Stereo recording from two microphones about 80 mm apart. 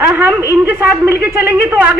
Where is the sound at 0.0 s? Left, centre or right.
Centre.